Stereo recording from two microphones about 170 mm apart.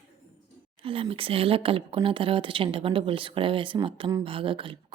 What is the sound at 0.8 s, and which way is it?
Speech, 35° right (ahead or behind).